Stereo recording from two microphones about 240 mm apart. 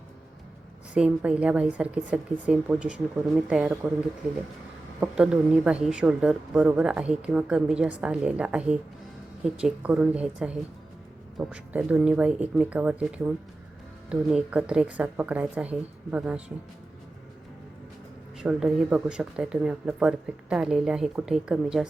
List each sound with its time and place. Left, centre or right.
0.9 s a woman's voice: centre
4.9 s a woman's voice: centre
18.3 s a woman's voice: centre